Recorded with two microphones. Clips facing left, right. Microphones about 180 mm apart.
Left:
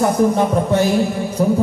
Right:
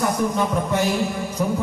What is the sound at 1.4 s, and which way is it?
Music, 35° left (ahead or behind).